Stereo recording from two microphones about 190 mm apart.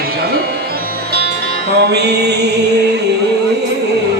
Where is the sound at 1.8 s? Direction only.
60° right (ahead or behind).